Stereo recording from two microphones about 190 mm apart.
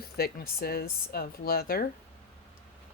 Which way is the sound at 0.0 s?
55° left (ahead or behind).